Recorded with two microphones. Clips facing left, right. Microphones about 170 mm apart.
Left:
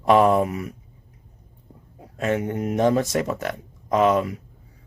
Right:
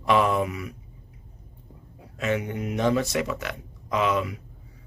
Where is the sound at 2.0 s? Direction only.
45° left (ahead or behind).